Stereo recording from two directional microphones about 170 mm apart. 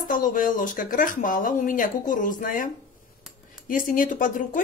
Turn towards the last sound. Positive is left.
turn(degrees=50)  # may be behind; listen again after turning